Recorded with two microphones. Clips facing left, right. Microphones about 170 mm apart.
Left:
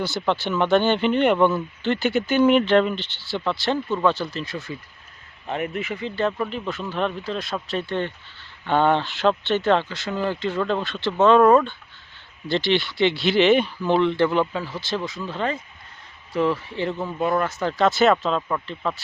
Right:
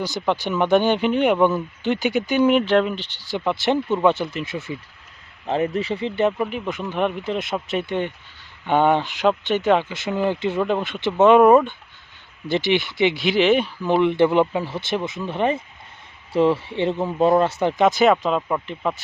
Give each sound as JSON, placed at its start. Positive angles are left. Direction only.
{"t": 0.0, "sound": "speech", "side_deg": -10}